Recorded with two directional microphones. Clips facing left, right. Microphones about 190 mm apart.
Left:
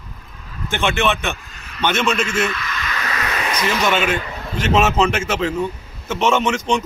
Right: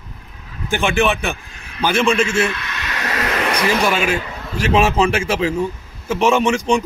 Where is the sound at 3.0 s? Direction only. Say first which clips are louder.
Right 5 dB; 45° right (ahead or behind).